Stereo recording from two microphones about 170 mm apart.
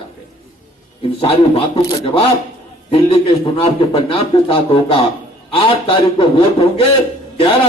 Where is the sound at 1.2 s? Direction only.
35° left (ahead or behind).